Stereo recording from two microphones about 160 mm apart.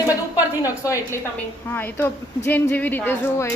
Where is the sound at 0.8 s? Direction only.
20° left (ahead or behind).